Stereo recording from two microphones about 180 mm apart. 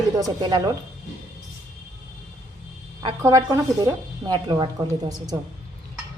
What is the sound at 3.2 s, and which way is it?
A woman's voice, 20° right (ahead or behind).